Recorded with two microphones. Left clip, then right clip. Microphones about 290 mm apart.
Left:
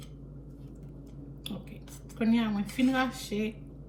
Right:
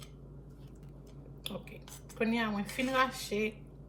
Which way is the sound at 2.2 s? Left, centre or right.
Centre.